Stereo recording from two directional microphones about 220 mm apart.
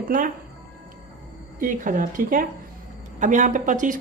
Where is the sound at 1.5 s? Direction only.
35° right (ahead or behind).